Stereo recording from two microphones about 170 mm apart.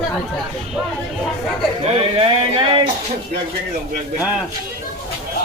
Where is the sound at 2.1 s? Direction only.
30° right (ahead or behind).